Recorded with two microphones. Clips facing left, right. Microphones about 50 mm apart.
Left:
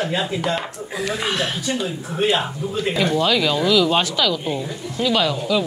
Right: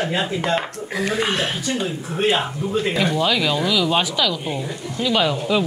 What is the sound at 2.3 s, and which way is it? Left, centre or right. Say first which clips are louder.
Speech: right 1 dB; right.